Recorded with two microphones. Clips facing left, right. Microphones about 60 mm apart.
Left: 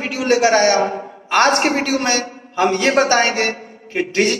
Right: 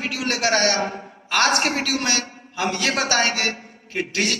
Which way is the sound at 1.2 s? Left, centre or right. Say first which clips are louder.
Left 5 dB; left.